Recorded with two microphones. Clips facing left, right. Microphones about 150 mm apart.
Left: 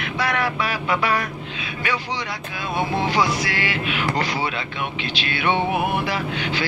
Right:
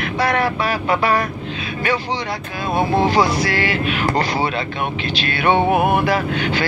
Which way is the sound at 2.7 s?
40° right (ahead or behind).